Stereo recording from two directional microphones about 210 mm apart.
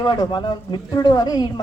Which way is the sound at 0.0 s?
20° left (ahead or behind).